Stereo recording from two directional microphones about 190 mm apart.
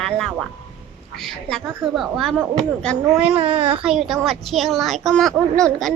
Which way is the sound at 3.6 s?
30° right (ahead or behind).